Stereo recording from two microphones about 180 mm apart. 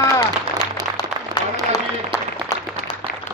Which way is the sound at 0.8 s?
20° right (ahead or behind).